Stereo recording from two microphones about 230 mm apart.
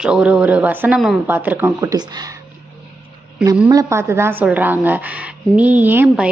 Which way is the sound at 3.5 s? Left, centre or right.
Centre.